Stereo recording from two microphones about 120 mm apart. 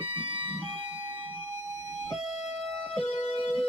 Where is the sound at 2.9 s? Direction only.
60° left (ahead or behind).